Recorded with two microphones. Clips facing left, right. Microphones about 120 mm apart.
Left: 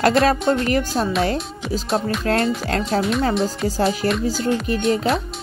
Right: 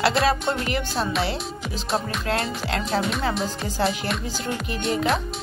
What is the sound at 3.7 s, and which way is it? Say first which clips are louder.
Speech: left 5 dB; 40° left (ahead or behind).